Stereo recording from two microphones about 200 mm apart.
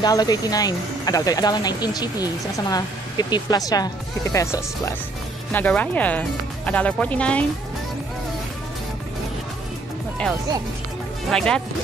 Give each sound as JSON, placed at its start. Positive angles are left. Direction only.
{"t": 0.0, "sound": "speech", "side_deg": 20}
{"t": 11.2, "sound": "speech", "side_deg": 5}